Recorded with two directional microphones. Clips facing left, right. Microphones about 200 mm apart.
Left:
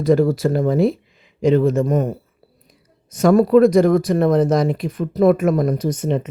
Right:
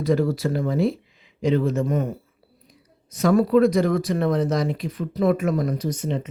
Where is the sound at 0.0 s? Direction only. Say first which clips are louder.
Left 6 dB; 50° left (ahead or behind).